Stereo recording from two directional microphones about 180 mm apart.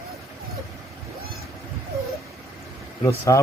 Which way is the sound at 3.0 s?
15° left (ahead or behind).